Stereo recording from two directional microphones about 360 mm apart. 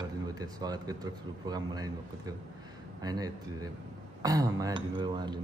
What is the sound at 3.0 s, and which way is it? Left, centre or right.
Speech, centre.